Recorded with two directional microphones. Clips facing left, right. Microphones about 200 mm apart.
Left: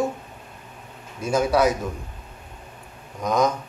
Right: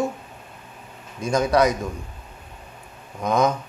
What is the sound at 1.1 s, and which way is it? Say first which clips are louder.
Speech: right 1 dB; 5° left (ahead or behind).